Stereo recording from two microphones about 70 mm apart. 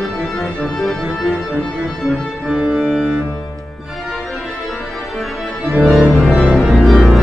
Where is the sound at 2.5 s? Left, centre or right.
Centre.